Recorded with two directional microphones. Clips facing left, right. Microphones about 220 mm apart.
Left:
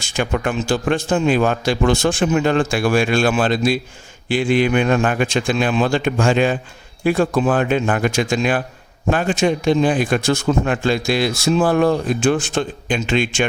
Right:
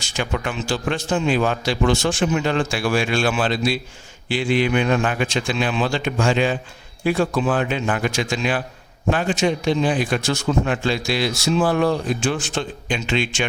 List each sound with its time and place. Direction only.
0.0 s a man's voice: 50° left (ahead or behind)